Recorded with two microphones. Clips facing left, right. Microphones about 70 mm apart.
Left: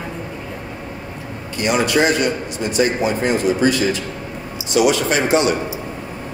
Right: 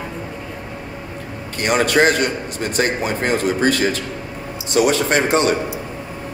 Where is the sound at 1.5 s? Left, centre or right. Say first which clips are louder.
Right 1 dB; right.